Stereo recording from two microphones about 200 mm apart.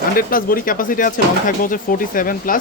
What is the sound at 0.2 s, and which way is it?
Speech, 45° left (ahead or behind).